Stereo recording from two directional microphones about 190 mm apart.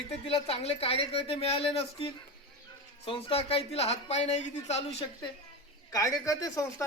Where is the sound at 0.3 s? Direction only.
30° left (ahead or behind).